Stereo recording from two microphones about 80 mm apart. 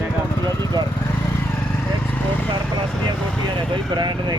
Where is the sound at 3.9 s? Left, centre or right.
Right.